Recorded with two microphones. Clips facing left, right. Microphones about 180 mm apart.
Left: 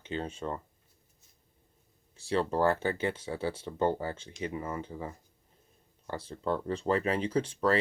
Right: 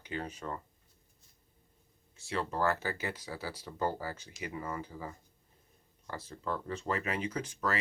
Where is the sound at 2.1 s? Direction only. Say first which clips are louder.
Left 6 dB; 30° left (ahead or behind).